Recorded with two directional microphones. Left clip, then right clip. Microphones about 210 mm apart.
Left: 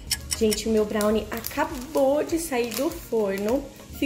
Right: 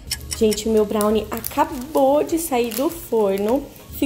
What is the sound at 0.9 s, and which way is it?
A woman's voice, 20° right (ahead or behind).